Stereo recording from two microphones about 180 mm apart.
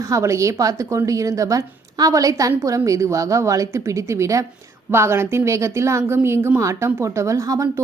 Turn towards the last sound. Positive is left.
turn(degrees=-15)  # may be behind; listen again after turning